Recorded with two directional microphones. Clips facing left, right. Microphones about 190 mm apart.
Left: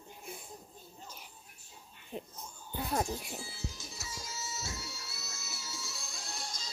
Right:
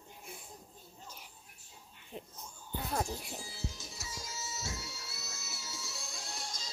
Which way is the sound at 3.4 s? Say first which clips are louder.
Even; 40° right (ahead or behind).